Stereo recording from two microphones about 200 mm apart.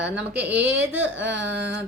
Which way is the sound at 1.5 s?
60° right (ahead or behind).